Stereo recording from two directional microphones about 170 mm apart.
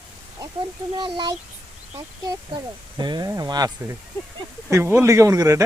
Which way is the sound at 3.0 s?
25° right (ahead or behind).